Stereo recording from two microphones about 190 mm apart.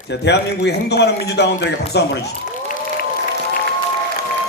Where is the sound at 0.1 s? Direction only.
65° left (ahead or behind).